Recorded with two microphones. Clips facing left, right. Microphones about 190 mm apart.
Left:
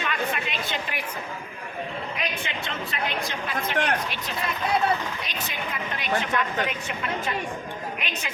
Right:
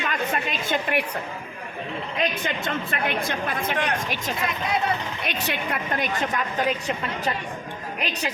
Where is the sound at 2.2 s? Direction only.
45° right (ahead or behind).